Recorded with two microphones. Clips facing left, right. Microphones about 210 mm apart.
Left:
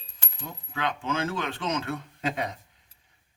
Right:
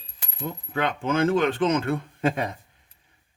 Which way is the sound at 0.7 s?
55° right (ahead or behind).